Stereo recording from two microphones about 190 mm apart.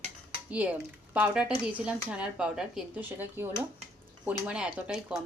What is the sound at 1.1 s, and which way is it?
A woman's voice, 5° right (ahead or behind).